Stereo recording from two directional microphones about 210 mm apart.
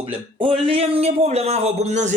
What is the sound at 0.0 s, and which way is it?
Speech, 25° right (ahead or behind).